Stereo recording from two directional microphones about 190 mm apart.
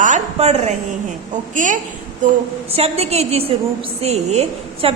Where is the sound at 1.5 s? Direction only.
40° right (ahead or behind).